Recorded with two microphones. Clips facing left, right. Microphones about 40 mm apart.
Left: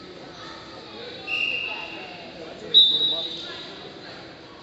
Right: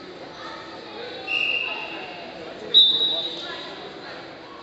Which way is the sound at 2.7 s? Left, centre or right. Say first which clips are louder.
Even; centre.